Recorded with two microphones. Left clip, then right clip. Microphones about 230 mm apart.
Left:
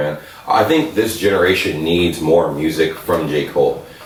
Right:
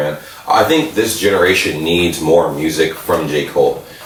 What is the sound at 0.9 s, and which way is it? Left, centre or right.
Speech, centre.